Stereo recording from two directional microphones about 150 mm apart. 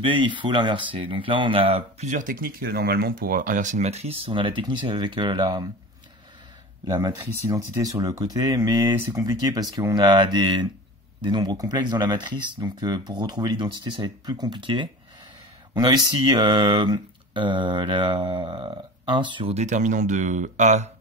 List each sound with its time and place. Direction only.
0.0 s speech: 35° right (ahead or behind)
6.9 s speech: 25° right (ahead or behind)
19.5 s speech: 50° right (ahead or behind)